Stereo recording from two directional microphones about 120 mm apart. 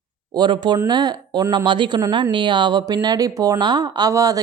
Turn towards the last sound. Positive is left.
turn(degrees=-30)  # may be behind; listen again after turning